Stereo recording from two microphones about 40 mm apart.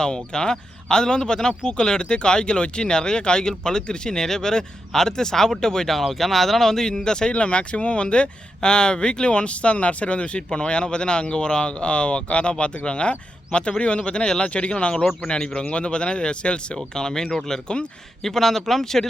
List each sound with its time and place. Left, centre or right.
0.0 s speech: centre
7.3 s speech: left
16.7 s speech: centre